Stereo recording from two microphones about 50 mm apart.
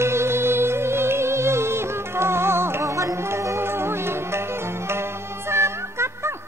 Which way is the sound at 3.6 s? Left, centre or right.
Right.